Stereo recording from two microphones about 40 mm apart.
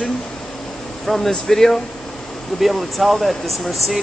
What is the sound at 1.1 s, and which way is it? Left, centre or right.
Speech, centre.